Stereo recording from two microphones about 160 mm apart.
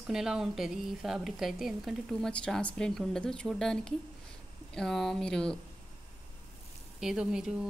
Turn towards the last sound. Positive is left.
turn(degrees=-5)  # may be behind; listen again after turning